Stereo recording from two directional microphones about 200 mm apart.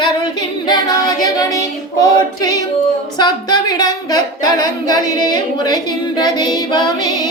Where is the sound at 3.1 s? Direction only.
20° left (ahead or behind).